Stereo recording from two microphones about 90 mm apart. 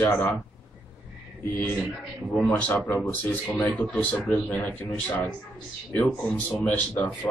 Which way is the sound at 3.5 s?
15° left (ahead or behind).